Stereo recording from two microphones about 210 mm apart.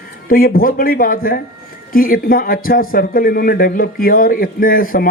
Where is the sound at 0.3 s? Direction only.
45° left (ahead or behind).